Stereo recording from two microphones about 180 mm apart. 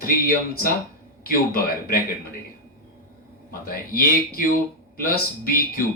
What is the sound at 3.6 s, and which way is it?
Speech, 55° left (ahead or behind).